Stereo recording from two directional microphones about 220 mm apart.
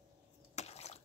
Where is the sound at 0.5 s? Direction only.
30° left (ahead or behind).